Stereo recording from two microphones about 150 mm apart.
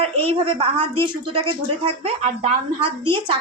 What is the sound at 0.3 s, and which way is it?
Speech, 35° right (ahead or behind).